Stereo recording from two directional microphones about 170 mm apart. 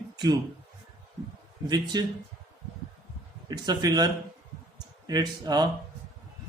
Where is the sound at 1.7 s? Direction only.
25° right (ahead or behind).